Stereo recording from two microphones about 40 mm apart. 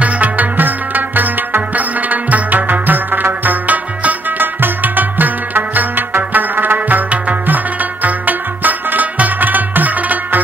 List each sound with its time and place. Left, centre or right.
0.0 s music: right
3.4 s music: right